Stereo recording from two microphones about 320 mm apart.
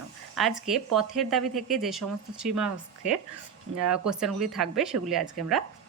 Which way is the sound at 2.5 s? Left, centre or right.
Right.